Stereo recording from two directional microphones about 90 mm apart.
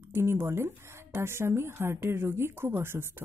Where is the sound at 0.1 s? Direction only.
30° right (ahead or behind).